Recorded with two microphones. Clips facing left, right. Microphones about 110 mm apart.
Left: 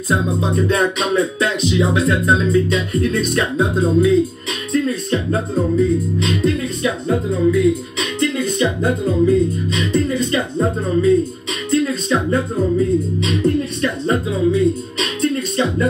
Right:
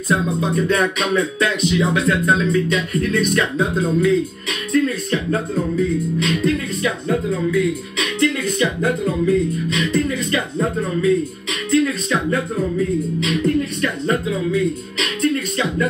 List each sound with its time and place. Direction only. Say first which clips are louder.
0.1 s speech: left 1 dB; 30° left (ahead or behind)